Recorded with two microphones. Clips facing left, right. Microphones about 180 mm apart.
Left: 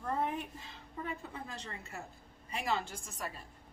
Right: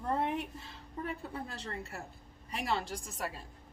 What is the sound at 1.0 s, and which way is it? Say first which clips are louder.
A woman's voice: right 3 dB; 40° right (ahead or behind).